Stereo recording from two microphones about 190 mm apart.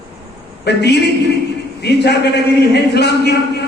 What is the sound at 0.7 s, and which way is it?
A man's voice, 60° left (ahead or behind).